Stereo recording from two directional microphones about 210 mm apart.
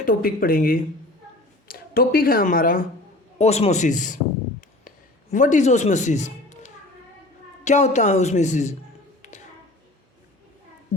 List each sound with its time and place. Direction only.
0.0 s speech: 40° left (ahead or behind)
3.3 s a woman's voice: 30° left (ahead or behind)
4.9 s a sound: 35° left (ahead or behind)
7.6 s a woman's voice: 35° left (ahead or behind)
9.2 s tap: 35° left (ahead or behind)